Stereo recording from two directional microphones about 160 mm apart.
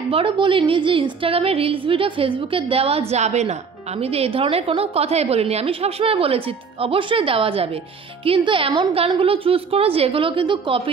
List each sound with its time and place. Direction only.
0.1 s a woman's voice: 35° right (ahead or behind)